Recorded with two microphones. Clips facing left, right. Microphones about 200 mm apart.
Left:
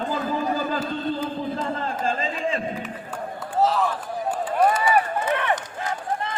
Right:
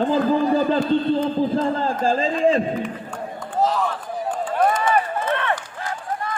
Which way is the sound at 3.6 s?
Centre (ahead or behind).